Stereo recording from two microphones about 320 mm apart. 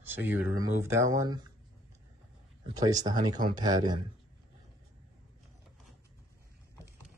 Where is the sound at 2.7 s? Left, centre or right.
Centre.